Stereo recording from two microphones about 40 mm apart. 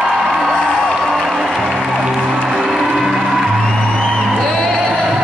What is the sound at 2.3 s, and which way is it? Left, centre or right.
Music, right.